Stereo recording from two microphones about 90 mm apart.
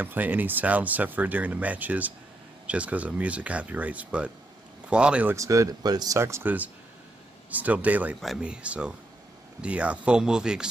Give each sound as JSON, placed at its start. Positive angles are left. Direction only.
{"t": 0.0, "sound": "speech", "side_deg": -20}
{"t": 5.3, "sound": "speech", "side_deg": -35}
{"t": 6.1, "sound": "speech", "side_deg": -30}
{"t": 7.5, "sound": "speech", "side_deg": -15}